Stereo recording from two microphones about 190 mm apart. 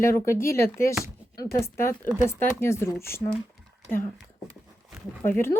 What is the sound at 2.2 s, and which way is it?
Speech, 10° left (ahead or behind).